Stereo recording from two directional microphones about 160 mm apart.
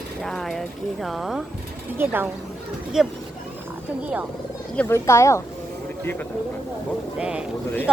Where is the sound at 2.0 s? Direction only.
10° right (ahead or behind).